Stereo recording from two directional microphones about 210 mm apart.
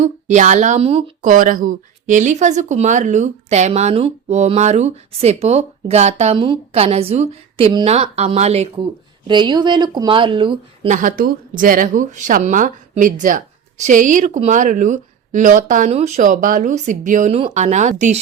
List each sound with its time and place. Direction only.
0.0 s speech: 35° right (ahead or behind)
10.8 s speech: 40° right (ahead or behind)